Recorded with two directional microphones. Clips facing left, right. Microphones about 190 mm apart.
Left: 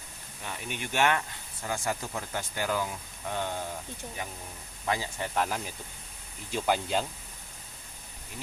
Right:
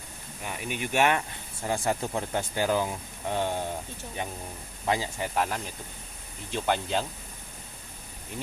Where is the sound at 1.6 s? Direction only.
30° right (ahead or behind).